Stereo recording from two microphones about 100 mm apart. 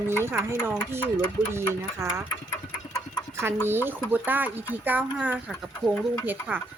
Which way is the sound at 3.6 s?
20° right (ahead or behind).